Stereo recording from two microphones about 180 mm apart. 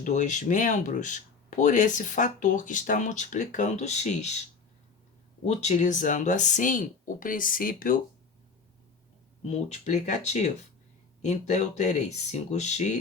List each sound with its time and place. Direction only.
0.0 s speech: 45° left (ahead or behind)
5.5 s speech: 40° left (ahead or behind)
9.4 s speech: 40° left (ahead or behind)